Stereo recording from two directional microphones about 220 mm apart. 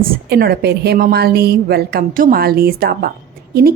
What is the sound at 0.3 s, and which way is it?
Speech, 45° right (ahead or behind).